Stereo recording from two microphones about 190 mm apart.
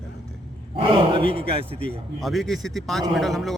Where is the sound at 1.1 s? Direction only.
30° right (ahead or behind).